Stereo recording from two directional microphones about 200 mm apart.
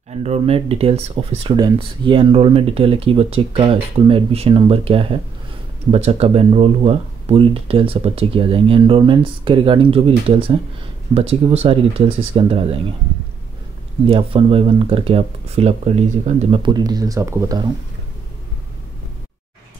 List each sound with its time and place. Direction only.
0.2 s speech: 30° right (ahead or behind)
14.0 s speech: 30° right (ahead or behind)